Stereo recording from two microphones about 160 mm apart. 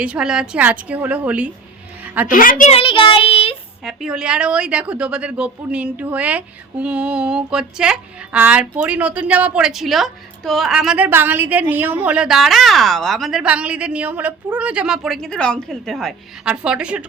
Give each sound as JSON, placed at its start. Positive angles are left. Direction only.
{"t": 0.0, "sound": "a woman's voice", "side_deg": -5}
{"t": 2.2, "sound": "a woman's voice", "side_deg": 60}
{"t": 2.7, "sound": "child singing", "side_deg": 35}
{"t": 3.8, "sound": "a woman's voice", "side_deg": -5}